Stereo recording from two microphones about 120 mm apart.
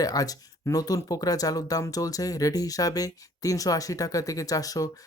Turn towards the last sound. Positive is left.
turn(degrees=30)  # may be behind; listen again after turning